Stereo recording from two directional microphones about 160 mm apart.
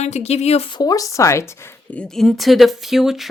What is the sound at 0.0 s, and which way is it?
Speech, 45° left (ahead or behind).